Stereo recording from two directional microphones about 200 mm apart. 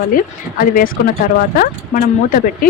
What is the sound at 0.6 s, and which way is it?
Speech, 40° left (ahead or behind).